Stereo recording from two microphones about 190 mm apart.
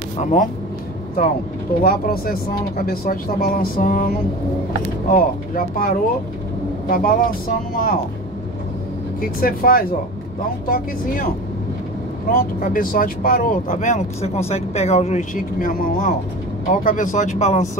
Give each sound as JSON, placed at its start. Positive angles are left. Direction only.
{"t": 0.2, "sound": "speech", "side_deg": 40}
{"t": 1.8, "sound": "speech", "side_deg": 50}
{"t": 9.2, "sound": "speech", "side_deg": 50}